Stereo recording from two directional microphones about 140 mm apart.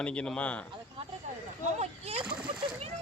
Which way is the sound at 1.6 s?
50° right (ahead or behind).